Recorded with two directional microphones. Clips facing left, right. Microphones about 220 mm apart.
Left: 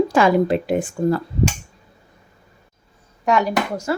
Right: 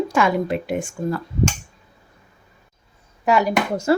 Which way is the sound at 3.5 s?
25° right (ahead or behind).